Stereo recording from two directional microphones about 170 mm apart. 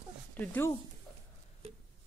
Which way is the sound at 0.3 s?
10° left (ahead or behind).